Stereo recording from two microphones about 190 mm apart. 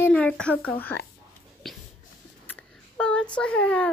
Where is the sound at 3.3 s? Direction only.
5° left (ahead or behind).